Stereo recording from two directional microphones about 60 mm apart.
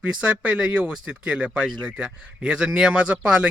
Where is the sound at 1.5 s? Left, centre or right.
Centre.